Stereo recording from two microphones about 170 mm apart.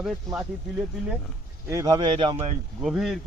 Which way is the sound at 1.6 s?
20° right (ahead or behind).